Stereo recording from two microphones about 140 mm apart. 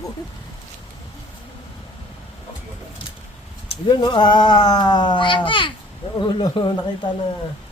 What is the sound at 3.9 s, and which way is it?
Speech, 35° left (ahead or behind).